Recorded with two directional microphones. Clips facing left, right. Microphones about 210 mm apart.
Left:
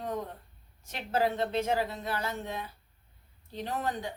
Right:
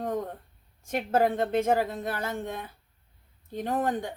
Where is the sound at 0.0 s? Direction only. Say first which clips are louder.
Right 4 dB; 50° right (ahead or behind).